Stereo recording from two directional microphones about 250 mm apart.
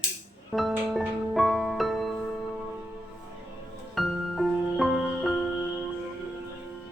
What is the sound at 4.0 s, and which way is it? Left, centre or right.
Music, centre.